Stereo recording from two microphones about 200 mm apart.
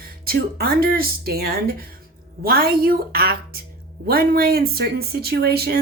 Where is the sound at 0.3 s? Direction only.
50° right (ahead or behind).